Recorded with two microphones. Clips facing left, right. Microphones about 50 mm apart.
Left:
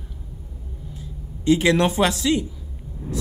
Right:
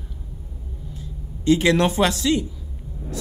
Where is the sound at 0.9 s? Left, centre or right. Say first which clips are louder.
Even; centre.